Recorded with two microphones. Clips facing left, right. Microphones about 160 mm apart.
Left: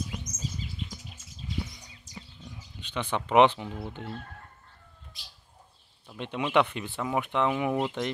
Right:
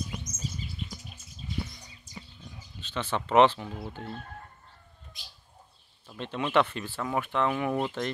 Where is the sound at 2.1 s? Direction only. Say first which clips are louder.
Even; 90° left.